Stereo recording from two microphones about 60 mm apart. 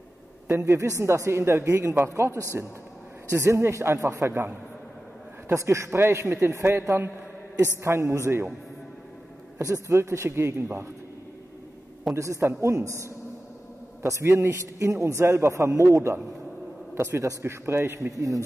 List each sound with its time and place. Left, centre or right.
0.5 s a man's voice: right
2.1 s a man's voice: right
5.5 s a man's voice: right
6.3 s a man's voice: right
9.6 s a man's voice: right
12.1 s a man's voice: right
16.9 s a man's voice: right
18.1 s a man's voice: right